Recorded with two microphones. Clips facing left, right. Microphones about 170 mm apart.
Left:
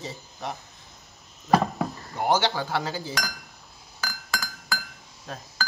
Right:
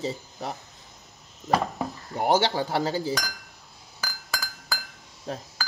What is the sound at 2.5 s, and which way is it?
Speech, 30° right (ahead or behind).